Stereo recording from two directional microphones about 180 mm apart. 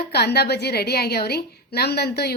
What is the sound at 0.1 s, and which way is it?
A woman's voice, 65° left (ahead or behind).